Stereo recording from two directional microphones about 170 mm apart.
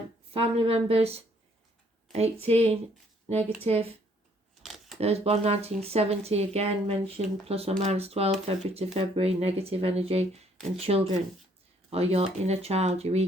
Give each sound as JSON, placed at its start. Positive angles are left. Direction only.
{"t": 0.3, "sound": "speech", "side_deg": -35}
{"t": 4.6, "sound": "camera", "side_deg": 0}
{"t": 4.9, "sound": "speech", "side_deg": -35}